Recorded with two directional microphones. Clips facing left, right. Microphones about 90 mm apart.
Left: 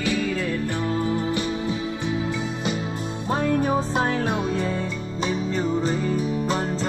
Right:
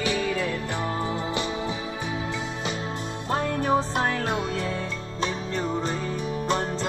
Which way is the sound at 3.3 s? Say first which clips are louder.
Left 2 dB; 15° left (ahead or behind).